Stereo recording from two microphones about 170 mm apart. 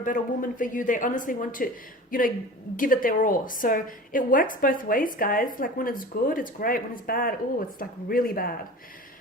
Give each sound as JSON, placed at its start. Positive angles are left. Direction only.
{"t": 0.0, "sound": "a woman's voice", "side_deg": 50}